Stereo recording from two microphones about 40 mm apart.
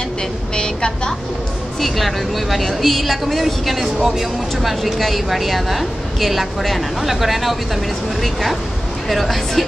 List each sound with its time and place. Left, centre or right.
0.6 s a woman's voice: left
1.8 s a woman's voice: centre
4.0 s speech: centre
4.6 s a woman's voice: centre